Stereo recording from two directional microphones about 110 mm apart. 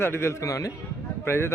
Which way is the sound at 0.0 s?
25° left (ahead or behind).